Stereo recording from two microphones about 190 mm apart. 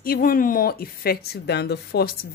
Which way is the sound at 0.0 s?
50° left (ahead or behind).